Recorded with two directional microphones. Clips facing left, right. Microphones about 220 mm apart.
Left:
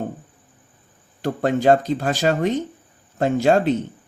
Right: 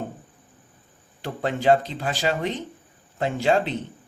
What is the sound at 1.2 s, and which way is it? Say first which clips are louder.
Speech: left 6 dB; 45° left (ahead or behind).